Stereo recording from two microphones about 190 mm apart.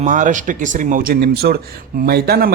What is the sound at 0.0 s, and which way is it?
A man's voice, 40° right (ahead or behind).